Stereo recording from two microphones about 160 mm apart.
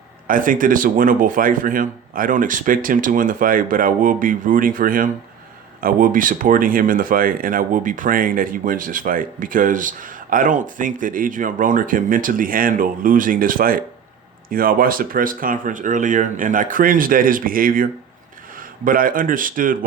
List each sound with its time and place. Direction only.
0.3 s speech: 55° right (ahead or behind)